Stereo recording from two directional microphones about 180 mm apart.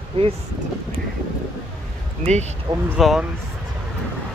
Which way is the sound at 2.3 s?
40° right (ahead or behind).